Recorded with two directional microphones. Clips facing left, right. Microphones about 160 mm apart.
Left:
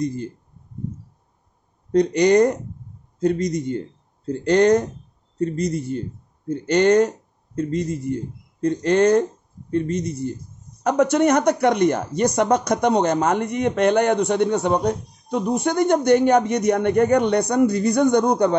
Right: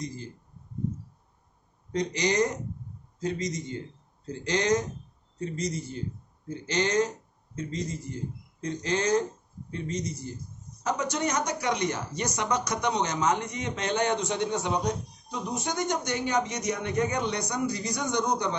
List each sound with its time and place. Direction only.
0.0 s speech: 60° left (ahead or behind)
1.9 s a man's voice: 60° left (ahead or behind)